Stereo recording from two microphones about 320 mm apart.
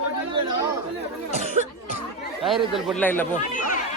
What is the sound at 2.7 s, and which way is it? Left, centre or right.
Speech, centre.